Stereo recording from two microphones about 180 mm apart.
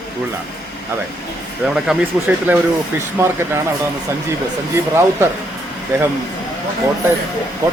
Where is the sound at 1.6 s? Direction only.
5° right (ahead or behind).